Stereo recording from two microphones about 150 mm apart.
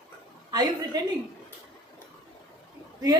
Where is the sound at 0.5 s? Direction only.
25° right (ahead or behind).